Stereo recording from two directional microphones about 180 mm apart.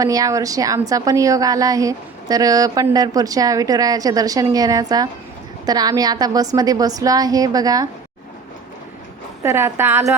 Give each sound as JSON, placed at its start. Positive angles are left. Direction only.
{"t": 0.0, "sound": "a woman's voice", "side_deg": -20}
{"t": 9.4, "sound": "a woman's voice", "side_deg": -15}